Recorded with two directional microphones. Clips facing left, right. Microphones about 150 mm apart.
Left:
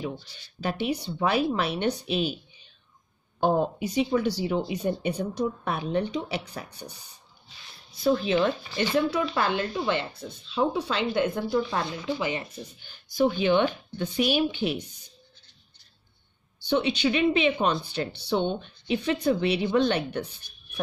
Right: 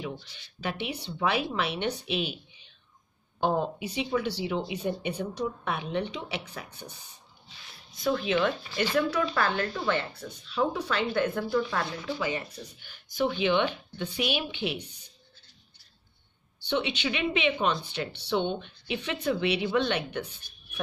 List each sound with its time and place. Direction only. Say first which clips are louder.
0.0 s speech: left 3 dB; 35° left (ahead or behind)
7.9 s speech: left 3 dB; 35° left (ahead or behind)
16.5 s speech: left 4 dB; 40° left (ahead or behind)